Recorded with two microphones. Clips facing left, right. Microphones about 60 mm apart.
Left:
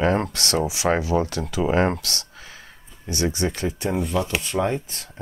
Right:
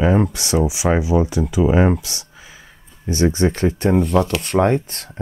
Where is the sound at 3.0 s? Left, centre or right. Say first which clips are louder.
Right 7 dB; right.